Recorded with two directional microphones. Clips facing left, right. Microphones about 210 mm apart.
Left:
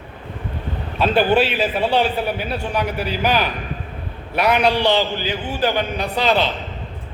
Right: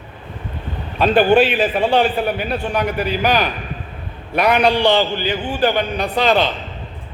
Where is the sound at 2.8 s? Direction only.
55° right (ahead or behind).